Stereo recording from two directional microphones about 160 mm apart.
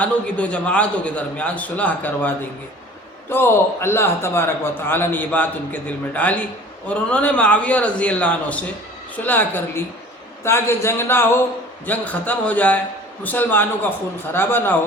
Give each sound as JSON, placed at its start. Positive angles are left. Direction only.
{"t": 0.0, "sound": "a man's voice", "side_deg": 10}